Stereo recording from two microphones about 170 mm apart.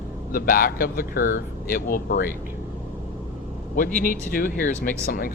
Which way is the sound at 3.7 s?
55° left (ahead or behind).